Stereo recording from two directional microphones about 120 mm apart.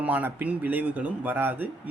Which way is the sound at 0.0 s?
15° right (ahead or behind).